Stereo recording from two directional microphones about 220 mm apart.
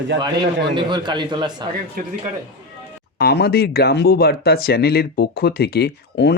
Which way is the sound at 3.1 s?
45° left (ahead or behind).